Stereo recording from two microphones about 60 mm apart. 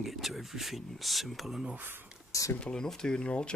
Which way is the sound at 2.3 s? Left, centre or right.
Left.